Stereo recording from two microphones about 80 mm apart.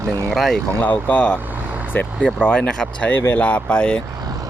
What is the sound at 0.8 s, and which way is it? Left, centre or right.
Speech, centre.